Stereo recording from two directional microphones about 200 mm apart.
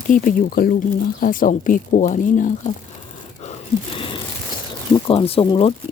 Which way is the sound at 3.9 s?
25° left (ahead or behind).